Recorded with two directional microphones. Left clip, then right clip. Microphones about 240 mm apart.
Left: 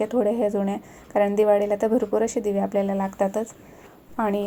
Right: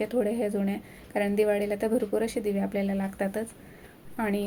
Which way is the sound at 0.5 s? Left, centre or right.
Left.